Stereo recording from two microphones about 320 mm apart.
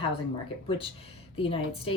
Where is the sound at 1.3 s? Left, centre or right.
Centre.